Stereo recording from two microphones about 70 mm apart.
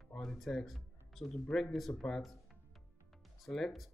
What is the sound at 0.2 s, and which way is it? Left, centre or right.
Music, centre.